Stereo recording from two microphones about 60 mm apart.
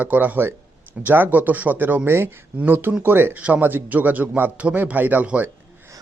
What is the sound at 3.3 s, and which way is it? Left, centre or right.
Speech, right.